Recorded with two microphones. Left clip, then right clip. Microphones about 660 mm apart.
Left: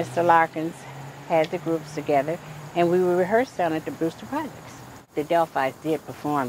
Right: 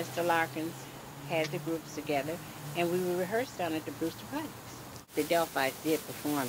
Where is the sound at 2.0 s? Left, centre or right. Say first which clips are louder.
Left 11 dB; left.